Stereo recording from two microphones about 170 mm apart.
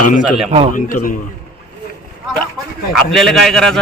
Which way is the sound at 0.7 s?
50° left (ahead or behind).